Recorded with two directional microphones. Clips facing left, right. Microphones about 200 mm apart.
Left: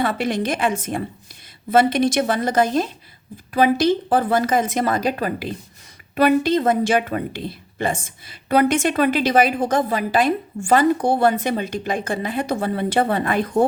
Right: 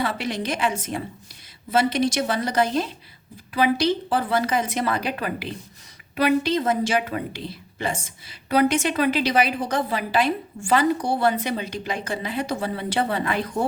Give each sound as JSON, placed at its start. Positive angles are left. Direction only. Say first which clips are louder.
{"t": 0.0, "sound": "a woman's voice", "louder": "left 5 dB", "side_deg": 50}